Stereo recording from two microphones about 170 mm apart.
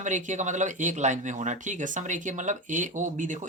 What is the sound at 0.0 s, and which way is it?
Speech, 45° right (ahead or behind).